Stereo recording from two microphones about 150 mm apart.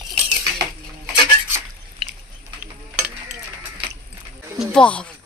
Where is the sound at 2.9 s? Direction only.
5° right (ahead or behind).